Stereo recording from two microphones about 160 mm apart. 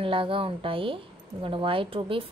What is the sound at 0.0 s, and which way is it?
A woman's voice, 35° right (ahead or behind).